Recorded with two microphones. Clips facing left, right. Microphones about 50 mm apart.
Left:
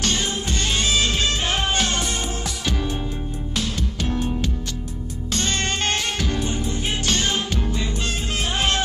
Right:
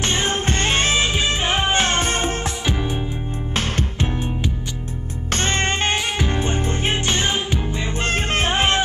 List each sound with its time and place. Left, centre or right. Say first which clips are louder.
0.0 s music: right 3 dB; right
1.0 s music: right 2 dB; centre; by 2.5 s right
2.6 s music: right 2 dB; centre
3.5 s music: right 3 dB; right
4.1 s music: left 1 dB; right
7.1 s music: right 2 dB; right
8.0 s music: right 5 dB; right